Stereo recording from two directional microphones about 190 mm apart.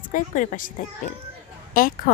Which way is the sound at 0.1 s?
45° left (ahead or behind).